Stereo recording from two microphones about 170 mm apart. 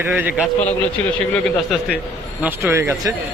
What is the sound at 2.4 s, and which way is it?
Speech, 15° right (ahead or behind).